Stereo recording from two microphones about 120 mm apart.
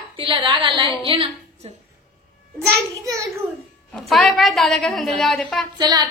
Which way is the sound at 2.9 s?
25° right (ahead or behind).